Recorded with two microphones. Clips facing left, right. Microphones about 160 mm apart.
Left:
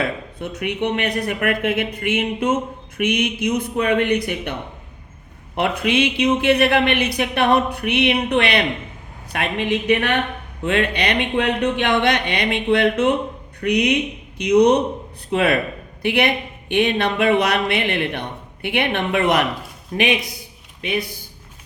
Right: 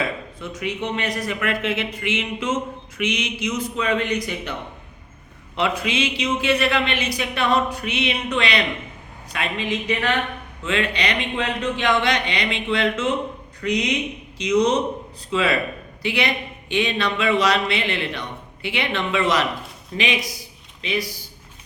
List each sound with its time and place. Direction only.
0.0 s speech: 60° left (ahead or behind)
5.5 s speech: 55° left (ahead or behind)